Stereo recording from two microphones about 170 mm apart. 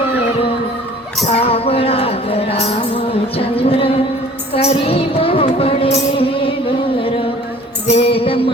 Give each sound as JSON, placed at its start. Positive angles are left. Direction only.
{"t": 1.3, "sound": "music", "side_deg": 35}
{"t": 7.9, "sound": "female singing", "side_deg": 35}